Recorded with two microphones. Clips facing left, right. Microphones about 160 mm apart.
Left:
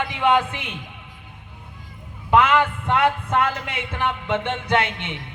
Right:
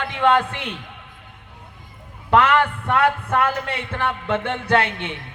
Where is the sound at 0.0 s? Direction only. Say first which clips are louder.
Right 1 dB; 15° left (ahead or behind).